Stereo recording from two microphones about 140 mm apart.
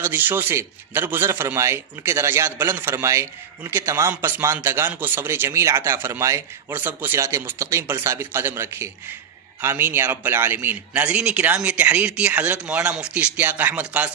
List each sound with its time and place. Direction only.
0.0 s a man's voice: 15° right (ahead or behind)